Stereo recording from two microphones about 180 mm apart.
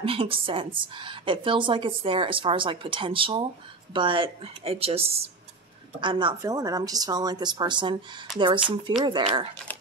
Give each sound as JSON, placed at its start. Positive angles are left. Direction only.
{"t": 0.0, "sound": "a woman's voice", "side_deg": -30}